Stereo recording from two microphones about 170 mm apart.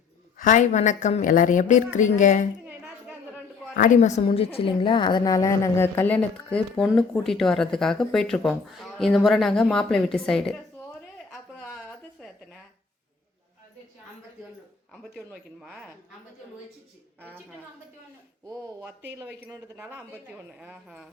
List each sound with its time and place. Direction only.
0.3 s a woman's voice: 50° left (ahead or behind)
2.6 s music: 5° right (ahead or behind)
3.8 s a woman's voice: 50° left (ahead or behind)
4.4 s a woman's voice: 30° left (ahead or behind); by 10.6 s 5° left (ahead or behind)
12.2 s a sound: 5° left (ahead or behind)
14.9 s a woman's voice: centre (ahead or behind)
19.1 s a woman's voice: 15° right (ahead or behind)